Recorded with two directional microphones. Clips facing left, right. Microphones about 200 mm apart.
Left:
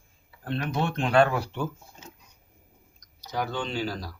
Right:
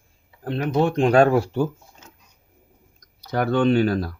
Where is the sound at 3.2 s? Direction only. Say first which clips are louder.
Right 11 dB; 60° right (ahead or behind).